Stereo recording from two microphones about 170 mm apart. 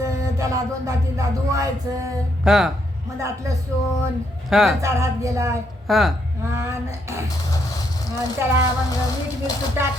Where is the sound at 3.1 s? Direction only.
15° right (ahead or behind).